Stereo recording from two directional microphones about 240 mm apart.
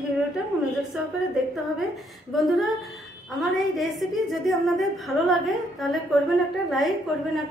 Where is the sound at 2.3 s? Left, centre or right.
Centre.